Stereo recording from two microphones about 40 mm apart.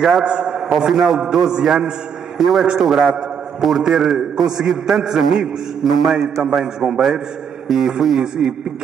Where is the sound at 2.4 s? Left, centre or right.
Centre.